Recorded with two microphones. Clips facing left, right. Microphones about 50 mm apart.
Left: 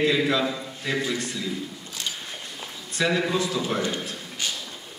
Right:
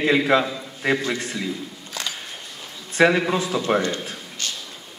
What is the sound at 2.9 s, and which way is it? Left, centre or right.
Speech, right.